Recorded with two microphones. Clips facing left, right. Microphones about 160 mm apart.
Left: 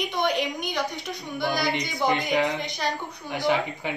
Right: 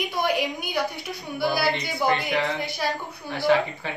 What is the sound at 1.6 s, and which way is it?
Speech, 15° left (ahead or behind).